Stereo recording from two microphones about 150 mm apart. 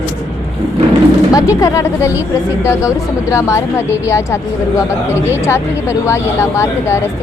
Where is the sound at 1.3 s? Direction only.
20° left (ahead or behind).